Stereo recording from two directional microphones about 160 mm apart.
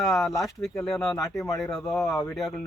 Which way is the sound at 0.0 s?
Centre (ahead or behind).